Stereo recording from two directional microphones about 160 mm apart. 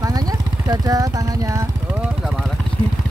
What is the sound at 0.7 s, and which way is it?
Speech, 20° right (ahead or behind).